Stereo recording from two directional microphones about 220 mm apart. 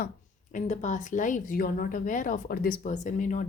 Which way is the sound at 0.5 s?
35° left (ahead or behind).